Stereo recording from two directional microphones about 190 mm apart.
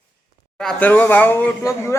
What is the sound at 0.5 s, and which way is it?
Speech, 5° left (ahead or behind).